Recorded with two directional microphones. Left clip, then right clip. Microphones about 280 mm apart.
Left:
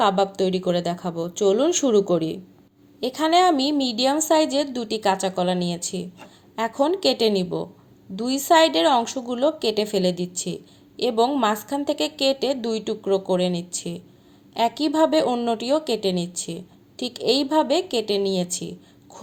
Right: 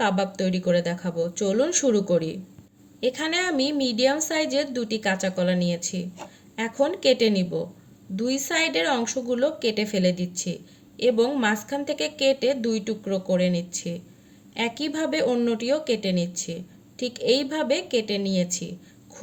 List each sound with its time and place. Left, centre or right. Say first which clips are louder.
0.0 s a woman's voice: left 5 dB; left